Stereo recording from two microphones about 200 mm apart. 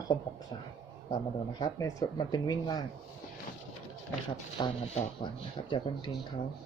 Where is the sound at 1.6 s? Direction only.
20° left (ahead or behind).